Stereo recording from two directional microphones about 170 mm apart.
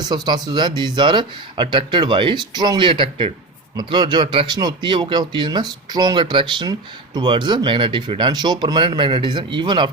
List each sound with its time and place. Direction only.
0.0 s speech: 25° right (ahead or behind)